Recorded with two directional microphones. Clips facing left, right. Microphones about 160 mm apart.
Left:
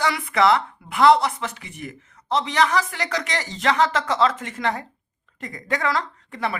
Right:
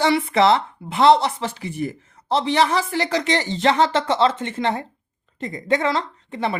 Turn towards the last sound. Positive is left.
turn(degrees=-25)  # may be behind; listen again after turning